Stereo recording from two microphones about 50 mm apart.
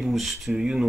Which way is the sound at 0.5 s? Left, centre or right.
Centre.